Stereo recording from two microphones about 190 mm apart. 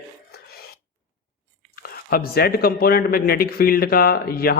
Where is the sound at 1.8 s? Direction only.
55° left (ahead or behind).